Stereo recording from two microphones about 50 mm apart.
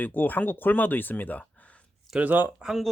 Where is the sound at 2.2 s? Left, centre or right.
Right.